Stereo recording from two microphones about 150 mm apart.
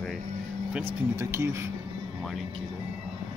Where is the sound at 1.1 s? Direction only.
15° right (ahead or behind).